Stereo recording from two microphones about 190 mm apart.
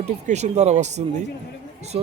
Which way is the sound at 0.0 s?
35° right (ahead or behind).